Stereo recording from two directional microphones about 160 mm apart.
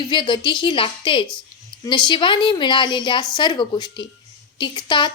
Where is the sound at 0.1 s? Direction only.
30° left (ahead or behind).